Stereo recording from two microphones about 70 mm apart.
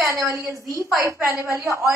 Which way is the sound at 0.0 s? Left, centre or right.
Right.